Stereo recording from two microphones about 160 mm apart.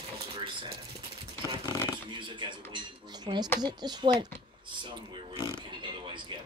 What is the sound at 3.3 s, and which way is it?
Speech, 30° right (ahead or behind).